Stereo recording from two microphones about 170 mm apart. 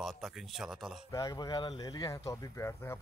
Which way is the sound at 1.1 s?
20° left (ahead or behind).